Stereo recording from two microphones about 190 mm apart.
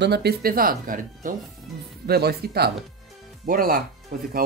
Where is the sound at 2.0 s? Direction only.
55° right (ahead or behind).